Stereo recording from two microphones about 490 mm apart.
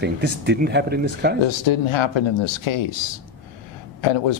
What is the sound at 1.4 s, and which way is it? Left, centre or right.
Speech, left.